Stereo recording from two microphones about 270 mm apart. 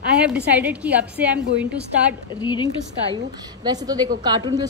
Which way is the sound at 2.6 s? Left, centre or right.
Centre.